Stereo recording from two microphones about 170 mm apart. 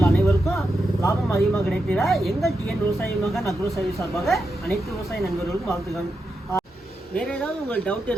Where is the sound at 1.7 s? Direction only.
Centre (ahead or behind).